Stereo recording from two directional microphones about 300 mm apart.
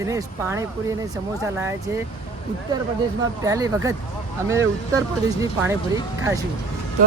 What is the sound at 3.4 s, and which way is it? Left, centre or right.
Speech, centre.